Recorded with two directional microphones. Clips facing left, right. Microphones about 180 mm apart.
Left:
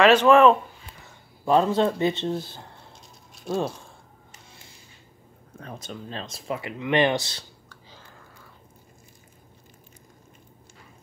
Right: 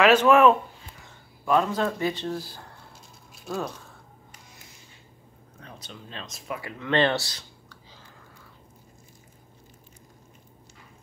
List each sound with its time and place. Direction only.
0.0 s speech: 5° right (ahead or behind)
1.4 s speech: 30° left (ahead or behind)
5.6 s speech: 45° left (ahead or behind); by 6.7 s 30° left (ahead or behind)
6.8 s speech: 15° left (ahead or behind)